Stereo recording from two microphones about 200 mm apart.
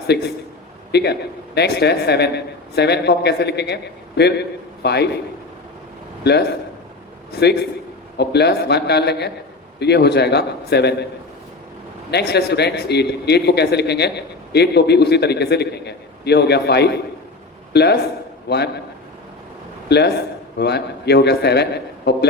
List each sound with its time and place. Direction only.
0.1 s a man's voice: 60° left (ahead or behind)
7.3 s a man's voice: 55° left (ahead or behind)
12.1 s a man's voice: 55° left (ahead or behind)
20.6 s a man's voice: 55° left (ahead or behind)